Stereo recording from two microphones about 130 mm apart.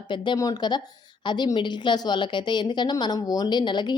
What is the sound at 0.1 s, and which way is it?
A woman's voice, 35° left (ahead or behind).